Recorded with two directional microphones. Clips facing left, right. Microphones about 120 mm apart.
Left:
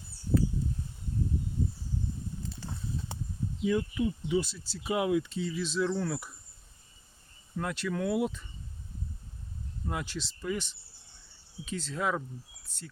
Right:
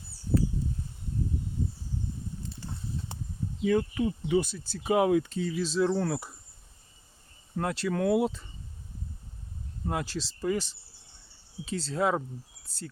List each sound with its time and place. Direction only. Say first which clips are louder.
3.6 s speech: right 3 dB; 60° right (ahead or behind); by 6.2 s 40° right (ahead or behind)
7.5 s speech: right 3 dB; 35° right (ahead or behind)
9.8 s speech: right 4 dB; 40° right (ahead or behind)
12.6 s bird: right 6 dB; 35° right (ahead or behind)